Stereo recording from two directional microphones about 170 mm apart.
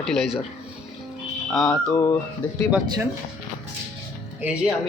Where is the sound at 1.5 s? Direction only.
5° left (ahead or behind).